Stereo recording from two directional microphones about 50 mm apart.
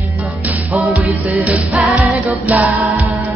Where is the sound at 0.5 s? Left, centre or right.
Right.